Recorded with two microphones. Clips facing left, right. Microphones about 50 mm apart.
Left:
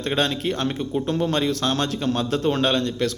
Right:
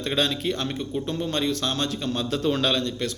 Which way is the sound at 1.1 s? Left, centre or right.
Left.